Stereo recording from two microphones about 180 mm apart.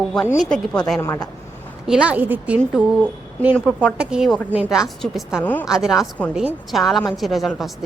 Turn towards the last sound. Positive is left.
turn(degrees=0)  # may be behind; listen again after turning